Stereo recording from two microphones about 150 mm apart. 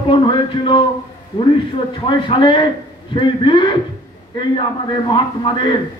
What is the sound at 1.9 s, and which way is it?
Speech, 30° left (ahead or behind).